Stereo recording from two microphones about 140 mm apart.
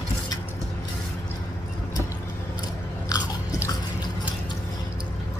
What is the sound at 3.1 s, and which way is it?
Biting, 25° left (ahead or behind).